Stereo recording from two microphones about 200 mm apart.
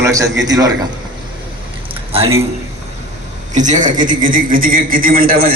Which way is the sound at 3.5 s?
40° right (ahead or behind).